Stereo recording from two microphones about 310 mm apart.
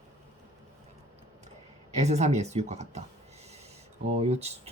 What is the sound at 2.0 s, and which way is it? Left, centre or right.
Speech, right.